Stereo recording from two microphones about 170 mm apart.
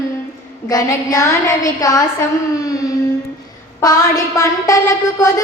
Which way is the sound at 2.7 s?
20° left (ahead or behind).